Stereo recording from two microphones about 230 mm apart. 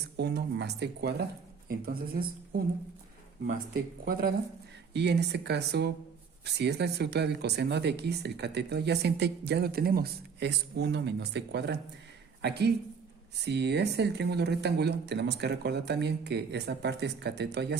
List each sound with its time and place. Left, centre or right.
0.2 s speech: right
4.0 s speech: right